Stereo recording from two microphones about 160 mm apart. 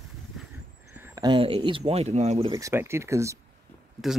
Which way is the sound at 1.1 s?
25° right (ahead or behind).